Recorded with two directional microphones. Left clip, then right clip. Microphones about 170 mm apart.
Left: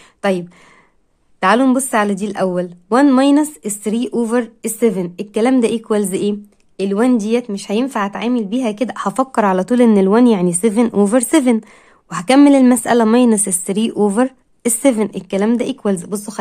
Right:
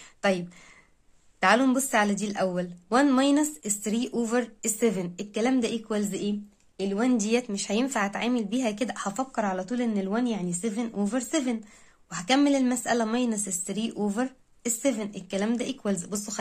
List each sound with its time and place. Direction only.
0.2 s a woman's voice: 20° left (ahead or behind); by 6.3 s 40° left (ahead or behind)
7.2 s a woman's voice: 25° left (ahead or behind)